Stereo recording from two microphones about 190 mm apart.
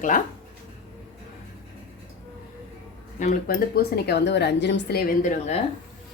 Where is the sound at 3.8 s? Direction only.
60° left (ahead or behind).